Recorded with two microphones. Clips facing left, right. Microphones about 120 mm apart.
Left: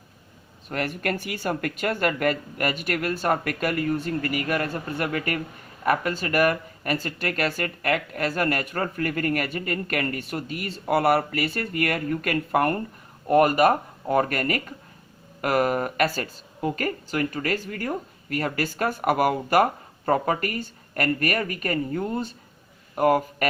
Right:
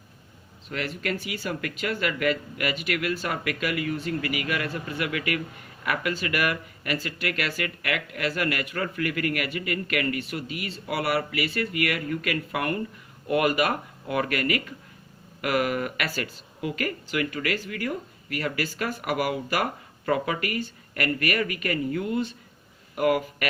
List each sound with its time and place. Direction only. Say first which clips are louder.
0.7 s speech: left 3 dB; 50° left (ahead or behind)